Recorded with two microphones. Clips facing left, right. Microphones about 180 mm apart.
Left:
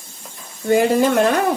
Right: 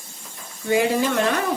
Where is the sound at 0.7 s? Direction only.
50° left (ahead or behind).